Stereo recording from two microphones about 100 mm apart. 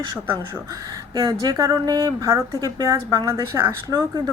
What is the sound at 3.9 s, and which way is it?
Speech, 40° right (ahead or behind).